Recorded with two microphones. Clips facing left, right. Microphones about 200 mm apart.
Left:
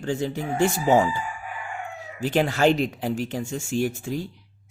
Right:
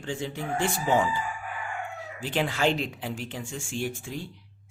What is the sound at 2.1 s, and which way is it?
Speech, 45° left (ahead or behind).